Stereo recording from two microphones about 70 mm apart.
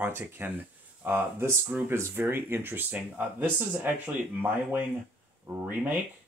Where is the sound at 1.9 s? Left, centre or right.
Right.